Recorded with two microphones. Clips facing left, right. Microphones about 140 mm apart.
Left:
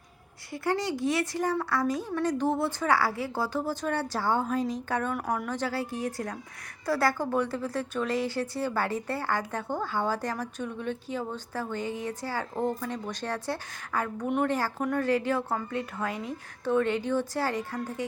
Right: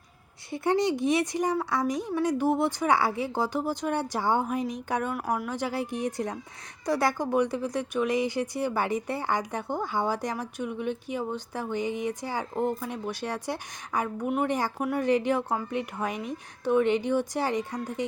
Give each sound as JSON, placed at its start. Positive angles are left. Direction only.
{"t": 0.5, "sound": "speech", "side_deg": -20}